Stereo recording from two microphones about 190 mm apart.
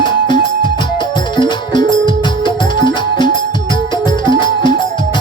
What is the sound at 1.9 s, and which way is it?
Music, 25° left (ahead or behind).